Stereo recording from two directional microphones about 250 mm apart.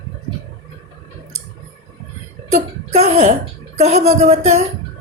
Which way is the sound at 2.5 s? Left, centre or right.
Right.